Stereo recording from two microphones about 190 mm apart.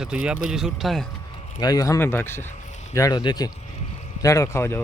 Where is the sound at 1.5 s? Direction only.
20° left (ahead or behind).